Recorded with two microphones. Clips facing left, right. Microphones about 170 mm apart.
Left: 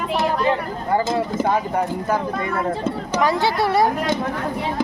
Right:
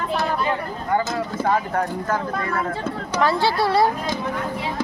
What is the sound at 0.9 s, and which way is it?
Speech, 25° left (ahead or behind).